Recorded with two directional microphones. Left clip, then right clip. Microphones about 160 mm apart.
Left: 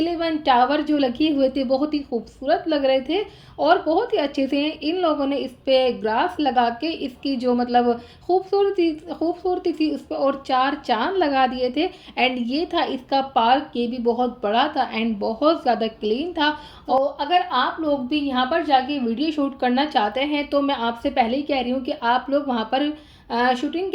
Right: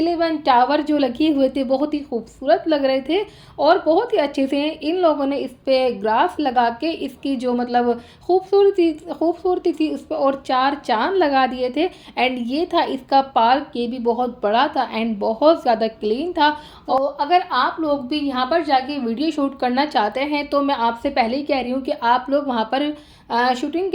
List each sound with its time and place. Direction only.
0.0 s a woman's voice: 35° right (ahead or behind)